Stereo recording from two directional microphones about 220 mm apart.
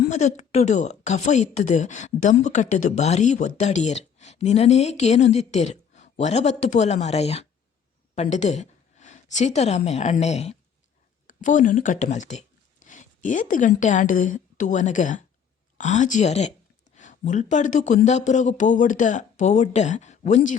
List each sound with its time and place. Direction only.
0.1 s a woman's voice: 30° left (ahead or behind)